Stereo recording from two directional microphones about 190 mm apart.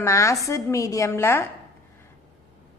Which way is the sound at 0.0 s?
15° left (ahead or behind).